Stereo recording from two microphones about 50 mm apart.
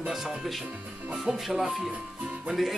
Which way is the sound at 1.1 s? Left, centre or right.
Centre.